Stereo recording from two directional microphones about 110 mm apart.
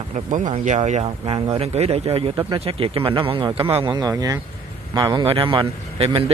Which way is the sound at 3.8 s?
35° right (ahead or behind).